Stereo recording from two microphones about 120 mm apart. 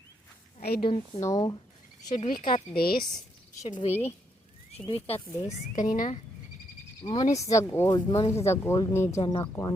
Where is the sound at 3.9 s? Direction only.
20° left (ahead or behind).